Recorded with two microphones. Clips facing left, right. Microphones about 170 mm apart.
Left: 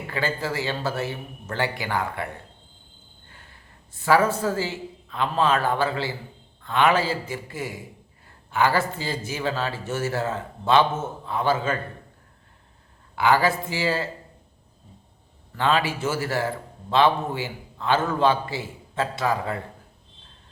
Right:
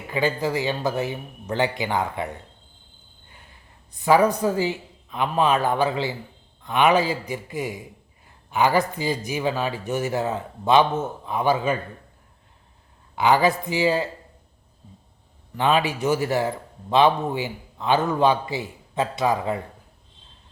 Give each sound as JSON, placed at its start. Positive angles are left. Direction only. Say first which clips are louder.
{"t": 0.1, "sound": "a man's voice", "louder": "right 5 dB", "side_deg": -15}
{"t": 3.9, "sound": "a man's voice", "louder": "right 2 dB", "side_deg": -15}
{"t": 13.1, "sound": "a man's voice", "louder": "right 2 dB", "side_deg": -20}
{"t": 15.5, "sound": "a man's voice", "louder": "right 2 dB", "side_deg": -20}